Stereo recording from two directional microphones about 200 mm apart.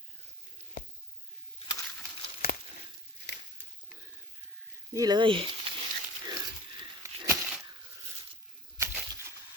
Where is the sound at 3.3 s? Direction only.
55° left (ahead or behind).